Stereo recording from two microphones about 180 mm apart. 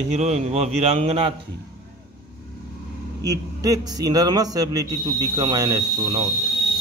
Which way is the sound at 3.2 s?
20° right (ahead or behind).